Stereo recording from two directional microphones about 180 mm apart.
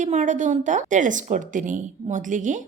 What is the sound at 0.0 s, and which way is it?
A woman's voice, 40° right (ahead or behind).